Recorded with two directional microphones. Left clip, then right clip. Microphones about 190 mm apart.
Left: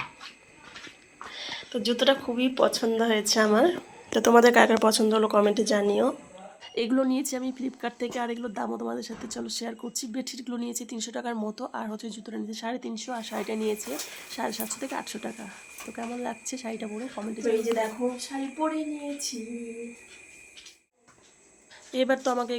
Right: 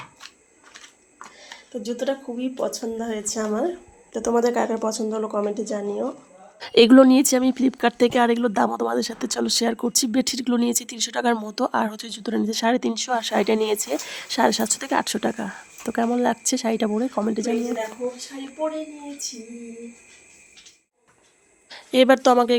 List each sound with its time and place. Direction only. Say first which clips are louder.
1.4 s a sound: left 3 dB; centre (ahead or behind)
2.3 s a woman's voice: left 3 dB; 5° left (ahead or behind)
6.6 s speech: right 14 dB; 50° right (ahead or behind)
21.7 s speech: right 10 dB; 50° right (ahead or behind)